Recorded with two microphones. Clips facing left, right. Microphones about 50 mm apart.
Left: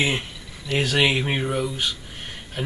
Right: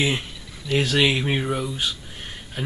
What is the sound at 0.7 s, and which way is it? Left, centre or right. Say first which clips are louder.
Speech: right 1 dB; centre.